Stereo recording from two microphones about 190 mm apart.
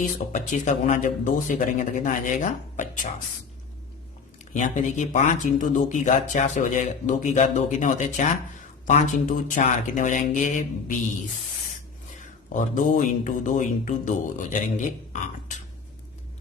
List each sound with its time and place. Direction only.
0.0 s speech: 40° left (ahead or behind)
4.5 s speech: 40° left (ahead or behind)
12.5 s speech: 40° left (ahead or behind)